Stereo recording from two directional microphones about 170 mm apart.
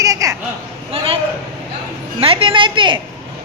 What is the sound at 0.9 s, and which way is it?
Speech, 35° right (ahead or behind).